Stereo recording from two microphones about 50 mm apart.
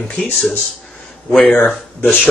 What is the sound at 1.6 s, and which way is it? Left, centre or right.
Speech, left.